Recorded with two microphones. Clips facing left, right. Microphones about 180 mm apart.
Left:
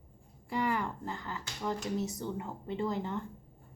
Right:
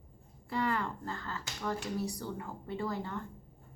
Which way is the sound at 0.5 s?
15° left (ahead or behind).